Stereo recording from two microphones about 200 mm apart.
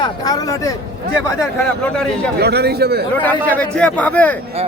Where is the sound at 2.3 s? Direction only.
55° right (ahead or behind).